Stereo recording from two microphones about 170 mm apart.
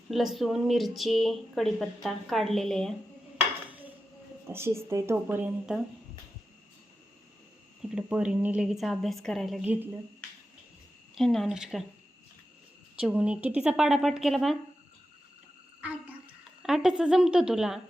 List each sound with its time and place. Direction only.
0.1 s a woman's voice: centre (ahead or behind)
4.4 s speech: 15° right (ahead or behind)
7.8 s a woman's voice: 5° right (ahead or behind)
9.6 s speech: 10° right (ahead or behind)
11.1 s a woman's voice: centre (ahead or behind)
13.0 s a woman's voice: 5° right (ahead or behind)
16.6 s a woman's voice: 5° right (ahead or behind)